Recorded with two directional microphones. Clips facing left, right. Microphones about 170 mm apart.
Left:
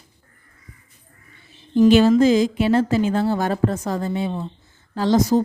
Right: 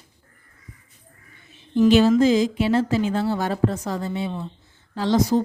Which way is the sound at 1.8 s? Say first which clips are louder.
Left 2 dB; 50° left (ahead or behind).